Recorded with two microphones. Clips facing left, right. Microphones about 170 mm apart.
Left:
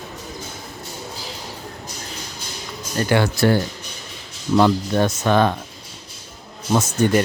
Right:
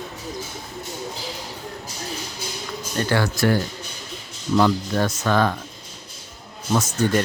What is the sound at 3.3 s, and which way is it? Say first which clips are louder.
Speech: left 3 dB; 30° left (ahead or behind).